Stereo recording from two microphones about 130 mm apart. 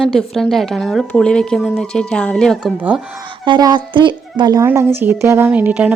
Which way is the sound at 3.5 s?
35° right (ahead or behind).